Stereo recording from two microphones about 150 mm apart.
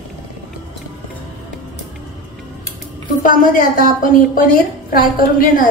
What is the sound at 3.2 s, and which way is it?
A woman's voice, 65° left (ahead or behind).